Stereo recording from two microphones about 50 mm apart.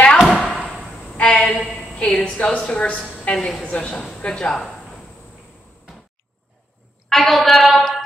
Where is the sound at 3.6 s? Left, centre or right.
Left.